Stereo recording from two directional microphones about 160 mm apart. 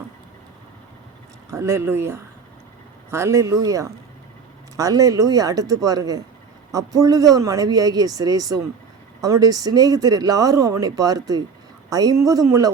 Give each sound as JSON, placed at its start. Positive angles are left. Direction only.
{"t": 1.5, "sound": "speech", "side_deg": -15}